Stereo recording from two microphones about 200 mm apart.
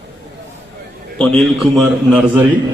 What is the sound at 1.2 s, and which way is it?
A man's voice, centre (ahead or behind).